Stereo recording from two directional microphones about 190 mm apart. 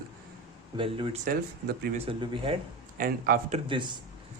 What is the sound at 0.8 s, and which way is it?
Speech, 25° right (ahead or behind).